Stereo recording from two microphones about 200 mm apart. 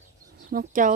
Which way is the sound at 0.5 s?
40° right (ahead or behind).